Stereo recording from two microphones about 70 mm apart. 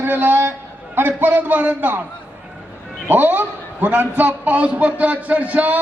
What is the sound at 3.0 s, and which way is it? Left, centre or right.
A man's voice, right.